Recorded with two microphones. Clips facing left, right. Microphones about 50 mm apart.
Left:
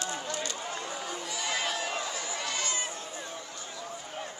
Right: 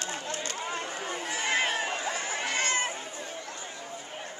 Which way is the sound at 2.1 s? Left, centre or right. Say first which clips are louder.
Right 4 dB; right.